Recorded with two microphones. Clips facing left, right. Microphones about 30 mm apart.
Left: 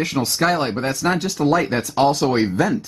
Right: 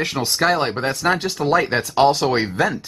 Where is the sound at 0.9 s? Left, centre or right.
Right.